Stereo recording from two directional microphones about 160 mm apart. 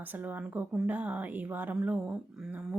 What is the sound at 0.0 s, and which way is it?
Speech, 10° right (ahead or behind).